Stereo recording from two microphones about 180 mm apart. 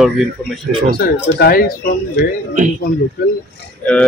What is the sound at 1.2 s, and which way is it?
Speech, 65° left (ahead or behind).